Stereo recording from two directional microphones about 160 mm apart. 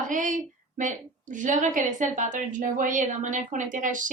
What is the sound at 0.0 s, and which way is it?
A woman's voice, 55° right (ahead or behind).